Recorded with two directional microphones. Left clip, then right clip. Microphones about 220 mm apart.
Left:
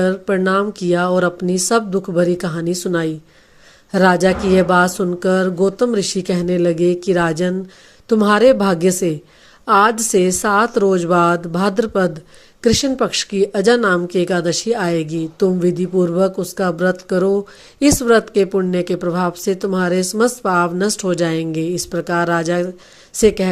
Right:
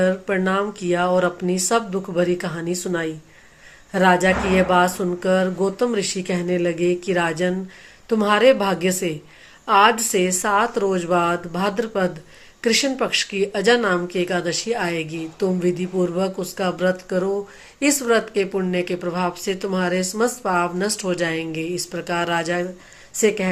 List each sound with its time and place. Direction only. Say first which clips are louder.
0.0 s speech: left 3 dB; 45° left (ahead or behind)